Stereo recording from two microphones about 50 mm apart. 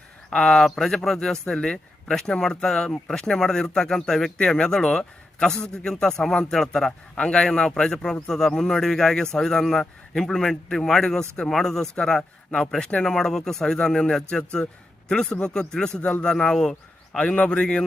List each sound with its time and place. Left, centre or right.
0.3 s speech: centre
7.2 s speech: centre